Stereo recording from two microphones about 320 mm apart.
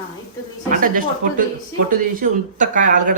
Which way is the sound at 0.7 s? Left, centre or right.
Right.